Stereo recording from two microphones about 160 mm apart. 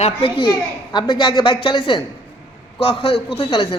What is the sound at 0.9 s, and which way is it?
A man's voice, 30° left (ahead or behind).